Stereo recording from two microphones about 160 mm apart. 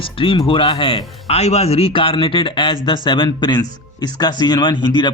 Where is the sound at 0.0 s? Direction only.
35° left (ahead or behind).